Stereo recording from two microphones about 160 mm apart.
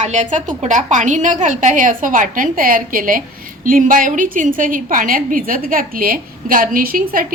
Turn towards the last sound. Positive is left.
turn(degrees=-60)  # may be behind; listen again after turning